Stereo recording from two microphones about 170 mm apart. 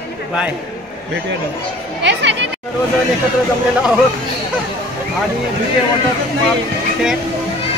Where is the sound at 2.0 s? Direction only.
90° right.